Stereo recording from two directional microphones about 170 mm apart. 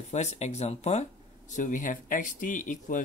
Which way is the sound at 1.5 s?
50° left (ahead or behind).